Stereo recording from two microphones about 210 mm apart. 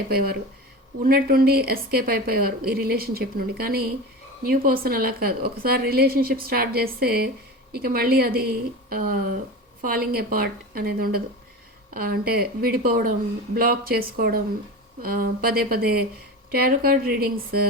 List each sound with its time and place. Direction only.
0.1 s a woman's voice: 45° right (ahead or behind)